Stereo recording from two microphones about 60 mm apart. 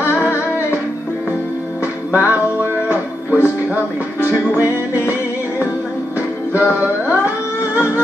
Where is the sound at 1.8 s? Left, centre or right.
Right.